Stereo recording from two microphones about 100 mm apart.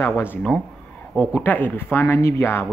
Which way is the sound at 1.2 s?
20° left (ahead or behind).